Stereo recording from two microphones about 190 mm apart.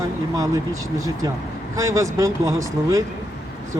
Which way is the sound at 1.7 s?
15° right (ahead or behind).